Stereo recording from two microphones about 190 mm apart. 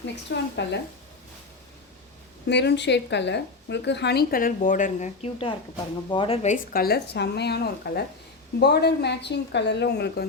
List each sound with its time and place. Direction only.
0.3 s a woman's voice: 65° left (ahead or behind)
2.5 s a woman's voice: 65° left (ahead or behind); by 6.6 s 35° left (ahead or behind)
6.7 s a woman's voice: 55° left (ahead or behind)